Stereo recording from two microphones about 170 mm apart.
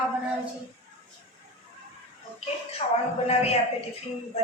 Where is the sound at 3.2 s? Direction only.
35° left (ahead or behind).